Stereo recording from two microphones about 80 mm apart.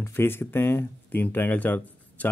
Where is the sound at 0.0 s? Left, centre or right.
Left.